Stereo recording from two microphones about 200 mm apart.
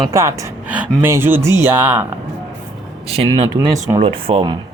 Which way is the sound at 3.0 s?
30° right (ahead or behind).